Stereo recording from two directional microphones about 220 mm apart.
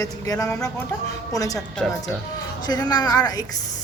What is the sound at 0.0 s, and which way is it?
A woman's voice, 15° left (ahead or behind).